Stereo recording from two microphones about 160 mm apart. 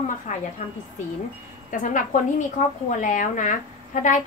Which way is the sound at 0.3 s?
50° left (ahead or behind).